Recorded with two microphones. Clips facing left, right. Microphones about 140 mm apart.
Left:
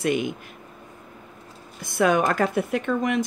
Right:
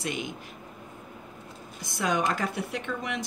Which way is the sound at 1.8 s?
55° left (ahead or behind).